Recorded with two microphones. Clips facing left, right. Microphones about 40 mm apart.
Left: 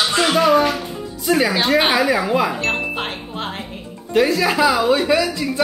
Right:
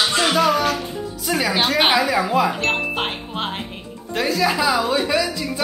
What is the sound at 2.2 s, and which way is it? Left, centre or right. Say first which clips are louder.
Speech: even; centre.